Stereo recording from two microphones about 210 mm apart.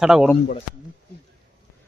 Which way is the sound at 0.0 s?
Centre (ahead or behind).